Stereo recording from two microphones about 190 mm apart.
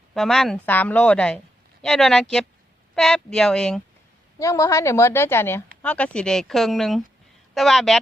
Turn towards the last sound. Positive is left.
turn(degrees=0)  # may be behind; listen again after turning